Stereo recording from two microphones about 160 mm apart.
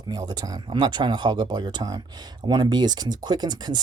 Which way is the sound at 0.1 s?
25° right (ahead or behind).